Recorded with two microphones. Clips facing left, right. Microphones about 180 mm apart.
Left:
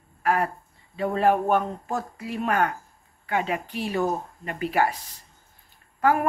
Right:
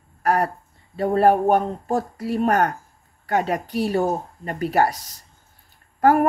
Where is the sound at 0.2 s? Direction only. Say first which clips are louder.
Right 3 dB; 40° right (ahead or behind).